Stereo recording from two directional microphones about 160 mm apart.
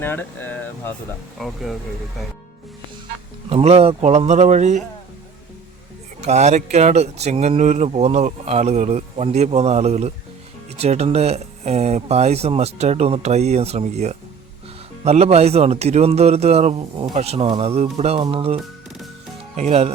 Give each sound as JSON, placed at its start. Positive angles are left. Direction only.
{"t": 0.0, "sound": "speech", "side_deg": 10}
{"t": 1.4, "sound": "speech", "side_deg": 0}
{"t": 3.5, "sound": "speech", "side_deg": -40}
{"t": 6.2, "sound": "speech", "side_deg": -45}
{"t": 18.2, "sound": "speech", "side_deg": -30}